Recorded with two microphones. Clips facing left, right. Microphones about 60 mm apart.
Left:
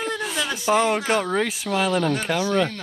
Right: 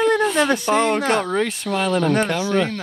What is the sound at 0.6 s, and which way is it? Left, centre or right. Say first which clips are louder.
Speech: right 2 dB; centre.